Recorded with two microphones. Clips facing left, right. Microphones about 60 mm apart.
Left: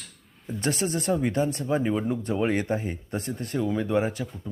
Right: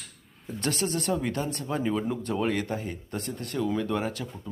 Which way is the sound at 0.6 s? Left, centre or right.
Left.